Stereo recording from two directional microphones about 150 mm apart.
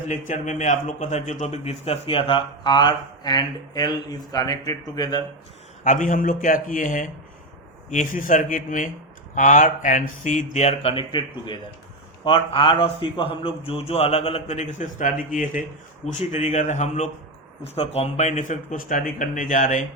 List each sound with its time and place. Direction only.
0.1 s a man's voice: 55° left (ahead or behind); by 5.2 s 25° left (ahead or behind)
5.8 s a man's voice: 55° left (ahead or behind)
16.0 s speech: 50° left (ahead or behind)
17.6 s speech: 40° left (ahead or behind); by 19.8 s 60° left (ahead or behind)